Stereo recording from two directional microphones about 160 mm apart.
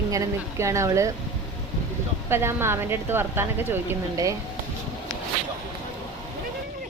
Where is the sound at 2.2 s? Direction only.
15° right (ahead or behind).